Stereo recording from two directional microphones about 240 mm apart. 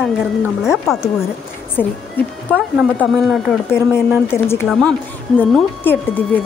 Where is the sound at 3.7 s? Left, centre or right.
Centre.